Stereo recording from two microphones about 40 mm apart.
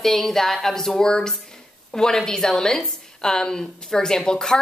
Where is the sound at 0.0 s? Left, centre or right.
Centre.